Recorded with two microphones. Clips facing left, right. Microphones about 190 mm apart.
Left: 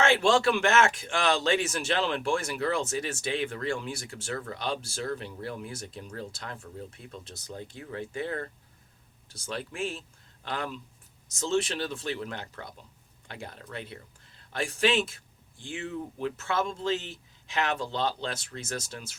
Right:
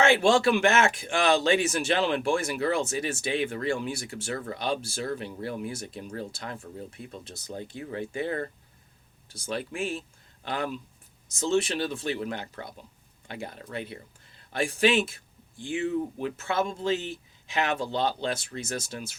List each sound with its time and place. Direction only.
0.0 s speech: 10° right (ahead or behind)
9.5 s speech: 10° right (ahead or behind)